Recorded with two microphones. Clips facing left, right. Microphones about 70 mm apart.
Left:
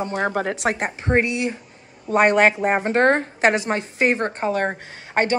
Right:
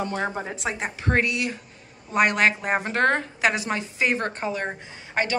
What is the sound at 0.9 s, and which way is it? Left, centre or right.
A woman's voice, left.